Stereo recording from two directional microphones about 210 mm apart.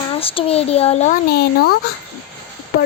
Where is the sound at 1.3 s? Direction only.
50° left (ahead or behind).